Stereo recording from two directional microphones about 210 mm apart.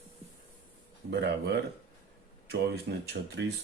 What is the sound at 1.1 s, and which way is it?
Speech, 50° right (ahead or behind).